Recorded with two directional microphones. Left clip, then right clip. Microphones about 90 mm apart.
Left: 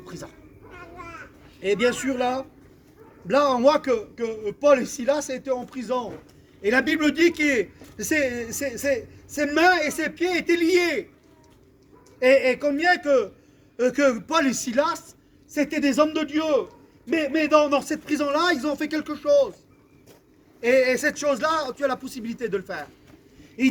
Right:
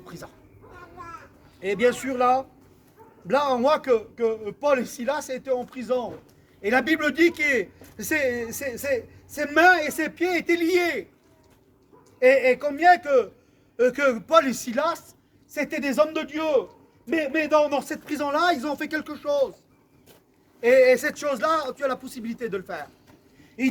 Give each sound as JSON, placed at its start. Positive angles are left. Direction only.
{"t": 0.0, "sound": "cat", "side_deg": -50}
{"t": 1.6, "sound": "a man's voice", "side_deg": -45}
{"t": 12.2, "sound": "a man's voice", "side_deg": -45}
{"t": 20.6, "sound": "a man's voice", "side_deg": -40}